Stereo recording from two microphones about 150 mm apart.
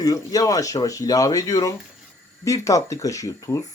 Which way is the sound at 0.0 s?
25° left (ahead or behind).